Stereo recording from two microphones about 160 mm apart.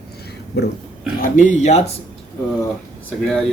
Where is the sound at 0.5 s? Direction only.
90° left.